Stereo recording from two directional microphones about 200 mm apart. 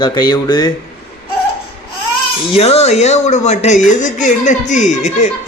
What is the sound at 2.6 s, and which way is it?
Speech, 30° left (ahead or behind).